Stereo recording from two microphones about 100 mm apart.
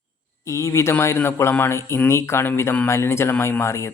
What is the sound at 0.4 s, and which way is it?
Speech, 30° left (ahead or behind).